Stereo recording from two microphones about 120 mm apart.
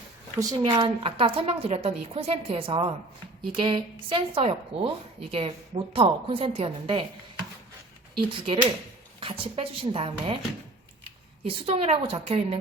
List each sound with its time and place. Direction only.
0.3 s speech: 30° right (ahead or behind)
0.6 s speech: 45° right (ahead or behind)
8.1 s speech: 45° right (ahead or behind)
11.4 s speech: 55° right (ahead or behind)